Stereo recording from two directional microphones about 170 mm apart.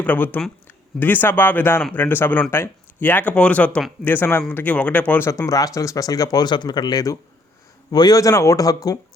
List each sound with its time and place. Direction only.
0.0 s a man's voice: 10° left (ahead or behind)